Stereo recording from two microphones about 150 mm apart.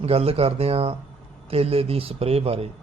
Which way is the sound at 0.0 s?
40° right (ahead or behind).